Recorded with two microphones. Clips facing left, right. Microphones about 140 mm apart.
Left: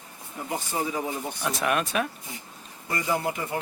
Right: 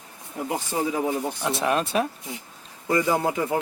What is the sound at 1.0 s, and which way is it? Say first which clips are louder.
Speech: right 5 dB; 30° right (ahead or behind).